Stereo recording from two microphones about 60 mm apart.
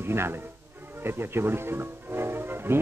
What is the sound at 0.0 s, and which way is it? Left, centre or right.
A man's voice, right.